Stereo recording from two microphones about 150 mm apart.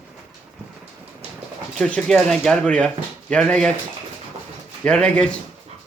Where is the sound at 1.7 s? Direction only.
5° left (ahead or behind).